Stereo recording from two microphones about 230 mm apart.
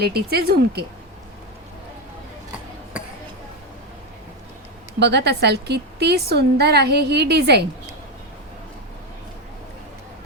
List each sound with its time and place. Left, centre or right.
0.0 s a woman's voice: right
2.9 s a sound: centre
4.9 s a woman's voice: right